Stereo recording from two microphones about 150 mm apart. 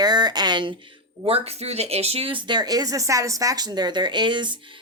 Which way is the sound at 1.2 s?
40° right (ahead or behind).